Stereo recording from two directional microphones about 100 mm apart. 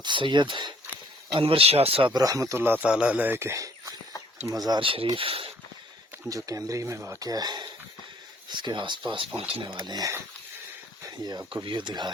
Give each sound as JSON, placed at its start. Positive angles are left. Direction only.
{"t": 0.0, "sound": "speech", "side_deg": -55}
{"t": 1.4, "sound": "speech", "side_deg": -70}
{"t": 2.0, "sound": "speech", "side_deg": -40}
{"t": 2.8, "sound": "speech", "side_deg": -10}
{"t": 4.8, "sound": "speech", "side_deg": -65}
{"t": 6.2, "sound": "speech", "side_deg": -35}
{"t": 11.0, "sound": "a sound", "side_deg": -40}
{"t": 11.6, "sound": "speech", "side_deg": -55}